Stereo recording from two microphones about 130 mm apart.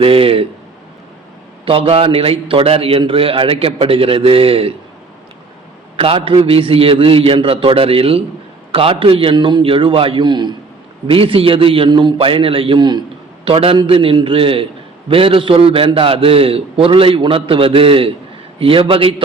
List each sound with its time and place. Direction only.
0.0 s a sound: 45° right (ahead or behind)
1.6 s a man's voice: 45° right (ahead or behind)
6.0 s a man's voice: 45° right (ahead or behind)